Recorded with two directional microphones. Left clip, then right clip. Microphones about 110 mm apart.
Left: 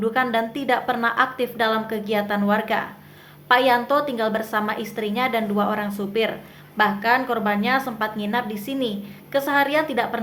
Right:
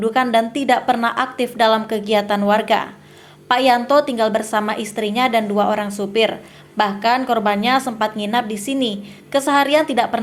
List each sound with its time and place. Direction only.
0.0 s a woman's voice: 35° right (ahead or behind)